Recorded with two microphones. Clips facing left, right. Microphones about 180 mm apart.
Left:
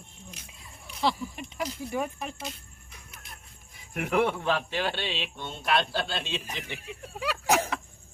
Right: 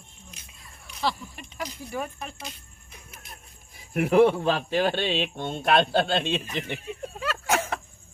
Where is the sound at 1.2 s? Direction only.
5° left (ahead or behind).